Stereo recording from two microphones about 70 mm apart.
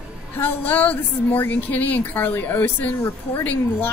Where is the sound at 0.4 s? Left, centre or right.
Left.